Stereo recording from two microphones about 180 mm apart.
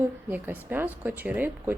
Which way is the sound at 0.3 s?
10° right (ahead or behind).